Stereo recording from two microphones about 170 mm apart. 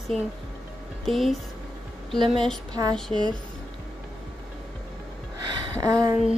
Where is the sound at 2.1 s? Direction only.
30° right (ahead or behind).